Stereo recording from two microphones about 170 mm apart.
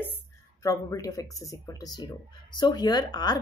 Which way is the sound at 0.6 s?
20° left (ahead or behind).